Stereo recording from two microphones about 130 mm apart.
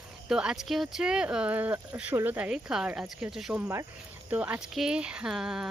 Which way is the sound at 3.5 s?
15° right (ahead or behind).